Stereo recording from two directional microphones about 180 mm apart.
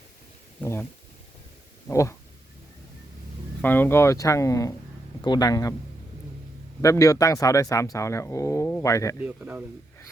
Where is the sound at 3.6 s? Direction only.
10° left (ahead or behind).